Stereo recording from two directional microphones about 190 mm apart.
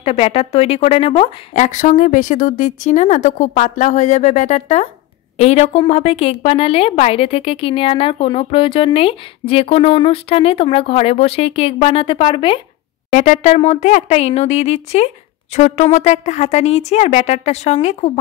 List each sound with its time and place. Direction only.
0.0 s a woman's voice: 30° left (ahead or behind)
13.1 s a woman's voice: 40° left (ahead or behind)